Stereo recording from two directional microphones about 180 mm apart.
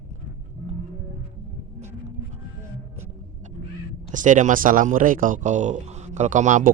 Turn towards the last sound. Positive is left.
turn(degrees=-45)  # may be behind; listen again after turning